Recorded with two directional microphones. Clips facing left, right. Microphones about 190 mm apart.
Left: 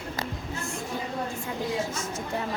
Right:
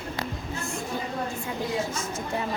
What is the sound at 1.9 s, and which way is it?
Speech, 15° right (ahead or behind).